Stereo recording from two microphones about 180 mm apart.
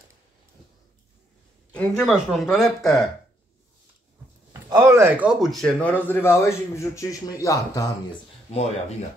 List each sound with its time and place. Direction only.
1.7 s speech: 5° left (ahead or behind)
4.6 s speech: 20° right (ahead or behind); by 7.9 s 20° left (ahead or behind)
8.5 s speech: 35° left (ahead or behind)